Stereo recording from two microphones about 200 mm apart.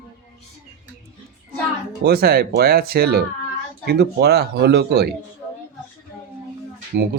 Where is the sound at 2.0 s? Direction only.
50° right (ahead or behind).